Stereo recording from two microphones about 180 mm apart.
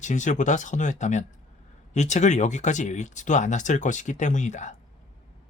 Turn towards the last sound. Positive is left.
turn(degrees=40)  # may be behind; listen again after turning